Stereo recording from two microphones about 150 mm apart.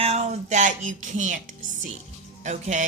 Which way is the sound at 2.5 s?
55° right (ahead or behind).